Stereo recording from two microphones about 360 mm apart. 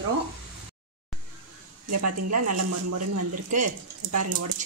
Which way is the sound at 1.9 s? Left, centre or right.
Right.